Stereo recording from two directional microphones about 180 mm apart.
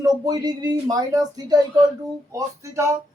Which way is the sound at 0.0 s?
20° right (ahead or behind).